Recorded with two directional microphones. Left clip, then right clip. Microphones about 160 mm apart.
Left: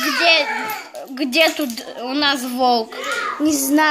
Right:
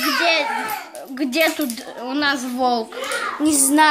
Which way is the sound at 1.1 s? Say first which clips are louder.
Left 3 dB; centre (ahead or behind).